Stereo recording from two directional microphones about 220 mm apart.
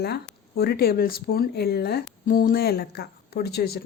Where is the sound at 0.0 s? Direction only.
45° left (ahead or behind).